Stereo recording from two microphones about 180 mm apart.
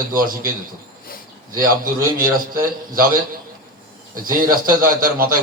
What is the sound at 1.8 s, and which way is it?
A man's voice, 50° right (ahead or behind).